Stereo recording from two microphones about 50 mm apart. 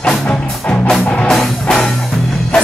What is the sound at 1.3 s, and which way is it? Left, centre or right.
Music, centre.